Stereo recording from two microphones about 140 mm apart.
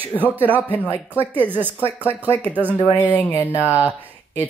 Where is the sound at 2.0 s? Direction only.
15° left (ahead or behind).